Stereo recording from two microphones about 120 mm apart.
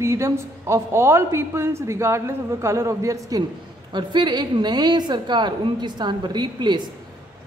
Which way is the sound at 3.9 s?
35° right (ahead or behind).